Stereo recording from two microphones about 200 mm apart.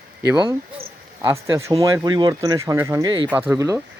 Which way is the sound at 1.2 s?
15° right (ahead or behind).